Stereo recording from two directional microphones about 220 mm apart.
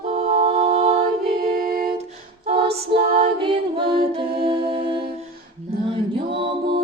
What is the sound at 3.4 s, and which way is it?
Music, 25° right (ahead or behind).